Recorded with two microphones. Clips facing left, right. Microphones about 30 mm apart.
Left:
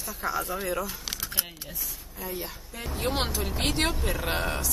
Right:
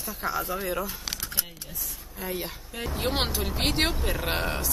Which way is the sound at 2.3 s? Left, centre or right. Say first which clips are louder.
Right 3 dB; right.